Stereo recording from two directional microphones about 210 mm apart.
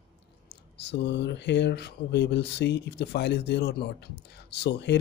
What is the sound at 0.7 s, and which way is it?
Speech, 55° left (ahead or behind).